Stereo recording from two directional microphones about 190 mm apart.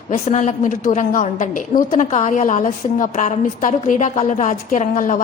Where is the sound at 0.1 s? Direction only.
40° left (ahead or behind).